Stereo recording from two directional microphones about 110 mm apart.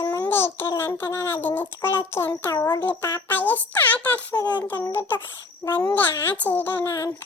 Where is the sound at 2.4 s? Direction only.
35° left (ahead or behind).